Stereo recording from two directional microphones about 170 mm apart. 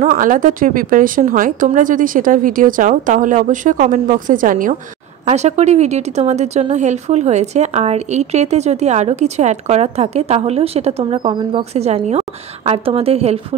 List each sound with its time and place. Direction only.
0.0 s a woman's voice: 50° right (ahead or behind)
5.3 s speech: 40° right (ahead or behind)